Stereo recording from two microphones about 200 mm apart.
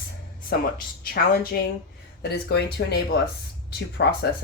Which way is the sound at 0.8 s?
45° left (ahead or behind).